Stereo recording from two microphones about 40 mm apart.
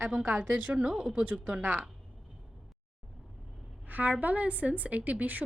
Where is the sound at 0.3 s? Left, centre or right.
Right.